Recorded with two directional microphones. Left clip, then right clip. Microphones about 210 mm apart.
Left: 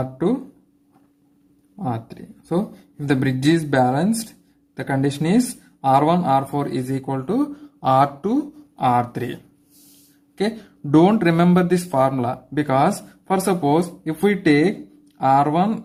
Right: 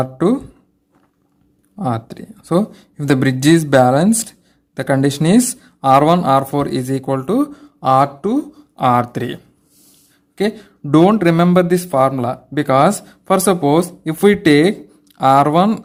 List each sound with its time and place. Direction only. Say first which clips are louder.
0.0 s speech: right 6 dB; 40° right (ahead or behind)
1.8 s speech: right 6 dB; 40° right (ahead or behind)